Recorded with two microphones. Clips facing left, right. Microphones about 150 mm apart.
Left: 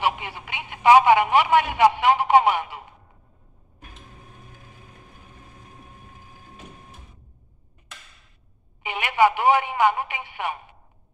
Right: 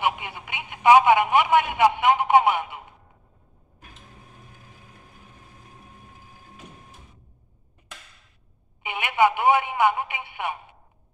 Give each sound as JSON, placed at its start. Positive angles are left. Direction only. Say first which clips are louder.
{"t": 0.0, "sound": "speech", "louder": "left 1 dB", "side_deg": -15}
{"t": 8.8, "sound": "telephone", "louder": "left 1 dB", "side_deg": -15}